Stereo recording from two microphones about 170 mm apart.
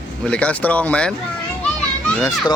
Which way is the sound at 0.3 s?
5° left (ahead or behind).